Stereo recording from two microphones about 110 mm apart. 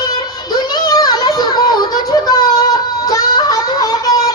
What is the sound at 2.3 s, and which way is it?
Child singing, 35° left (ahead or behind).